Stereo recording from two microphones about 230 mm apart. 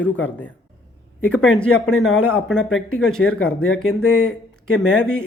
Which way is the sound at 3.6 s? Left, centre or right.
Left.